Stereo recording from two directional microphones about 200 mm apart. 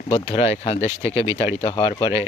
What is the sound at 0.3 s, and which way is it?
Speech, 30° left (ahead or behind).